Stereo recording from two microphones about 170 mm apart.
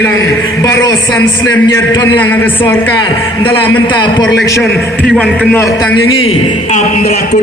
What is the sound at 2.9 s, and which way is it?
A man's voice, 25° left (ahead or behind).